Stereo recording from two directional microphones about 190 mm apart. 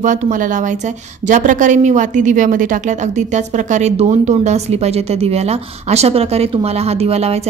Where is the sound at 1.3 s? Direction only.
40° right (ahead or behind).